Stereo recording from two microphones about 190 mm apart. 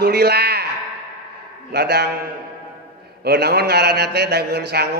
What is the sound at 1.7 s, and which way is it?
Speech, 60° right (ahead or behind).